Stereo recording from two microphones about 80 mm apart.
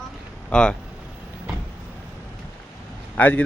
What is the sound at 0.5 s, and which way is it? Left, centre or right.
Speech, centre.